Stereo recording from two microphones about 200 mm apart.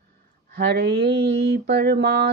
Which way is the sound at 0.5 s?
55° right (ahead or behind).